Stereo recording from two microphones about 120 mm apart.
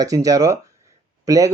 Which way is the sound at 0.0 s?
30° right (ahead or behind).